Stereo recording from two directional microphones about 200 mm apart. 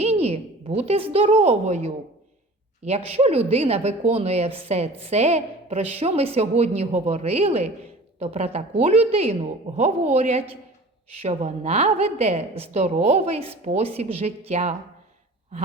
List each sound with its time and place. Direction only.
0.0 s a woman's voice: 30° right (ahead or behind)